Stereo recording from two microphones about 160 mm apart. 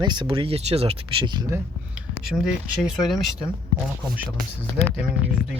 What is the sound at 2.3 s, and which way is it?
Speech, 5° right (ahead or behind).